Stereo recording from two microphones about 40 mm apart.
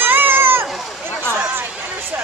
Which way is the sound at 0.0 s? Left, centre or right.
Right.